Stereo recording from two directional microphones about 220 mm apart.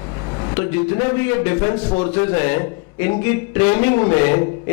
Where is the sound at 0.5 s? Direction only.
10° left (ahead or behind).